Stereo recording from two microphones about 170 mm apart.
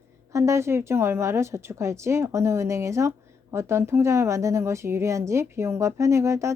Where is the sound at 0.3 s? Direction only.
15° right (ahead or behind).